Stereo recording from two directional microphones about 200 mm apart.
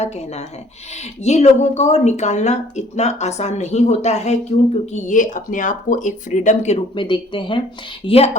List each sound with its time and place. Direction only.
1.2 s speech: 35° left (ahead or behind)